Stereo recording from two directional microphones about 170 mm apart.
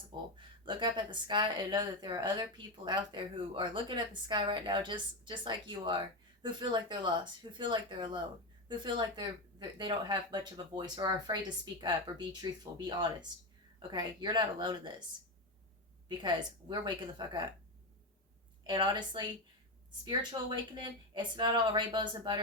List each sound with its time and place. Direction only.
0.3 s speech: 30° right (ahead or behind)
16.0 s speech: 25° right (ahead or behind)
18.6 s speech: 25° right (ahead or behind)
20.3 s speech: 25° right (ahead or behind)